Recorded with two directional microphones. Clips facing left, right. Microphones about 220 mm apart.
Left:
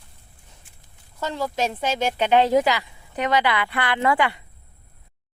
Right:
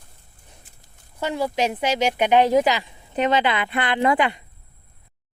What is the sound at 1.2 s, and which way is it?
Speech, 15° right (ahead or behind).